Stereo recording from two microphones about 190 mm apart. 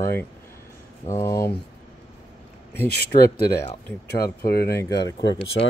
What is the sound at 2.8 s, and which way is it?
Speech, 55° left (ahead or behind).